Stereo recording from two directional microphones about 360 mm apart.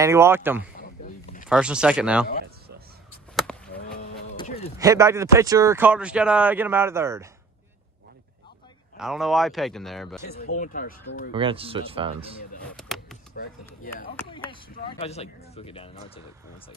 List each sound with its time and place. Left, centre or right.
0.0 s speech: centre
3.3 s chop: centre
4.4 s a sound: centre
4.7 s speech: centre
8.9 s speech: centre
10.4 s speech: left
11.3 s speech: centre
12.7 s a sound: centre
14.1 s speech: centre